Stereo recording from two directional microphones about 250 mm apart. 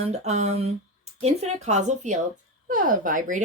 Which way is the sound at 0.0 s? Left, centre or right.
Right.